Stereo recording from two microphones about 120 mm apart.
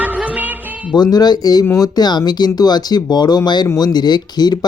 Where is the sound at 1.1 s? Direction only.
35° left (ahead or behind).